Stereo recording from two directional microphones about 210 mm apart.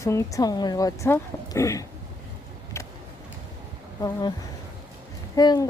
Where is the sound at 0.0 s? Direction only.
15° left (ahead or behind).